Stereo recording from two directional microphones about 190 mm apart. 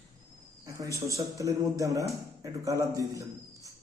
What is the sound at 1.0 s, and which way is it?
A man's voice, 15° right (ahead or behind).